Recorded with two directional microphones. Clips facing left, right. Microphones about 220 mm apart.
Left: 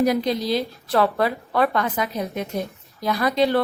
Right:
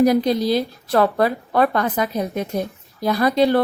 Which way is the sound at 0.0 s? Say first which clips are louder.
Right 4 dB; 40° right (ahead or behind).